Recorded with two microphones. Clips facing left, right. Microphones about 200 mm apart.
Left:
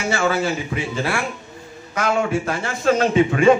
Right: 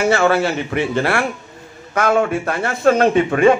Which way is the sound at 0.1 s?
60° right (ahead or behind).